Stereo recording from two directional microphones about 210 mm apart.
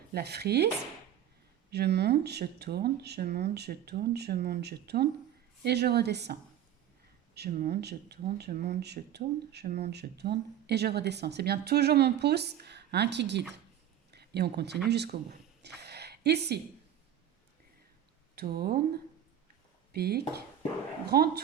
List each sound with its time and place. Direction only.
0.1 s speech: 50° right (ahead or behind)
1.7 s speech: 50° right (ahead or behind)
7.3 s speech: 45° right (ahead or behind)
18.3 s speech: 45° right (ahead or behind)
19.9 s speech: 50° right (ahead or behind)